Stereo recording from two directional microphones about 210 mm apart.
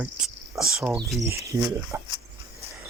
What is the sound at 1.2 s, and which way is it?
Speech, 15° right (ahead or behind).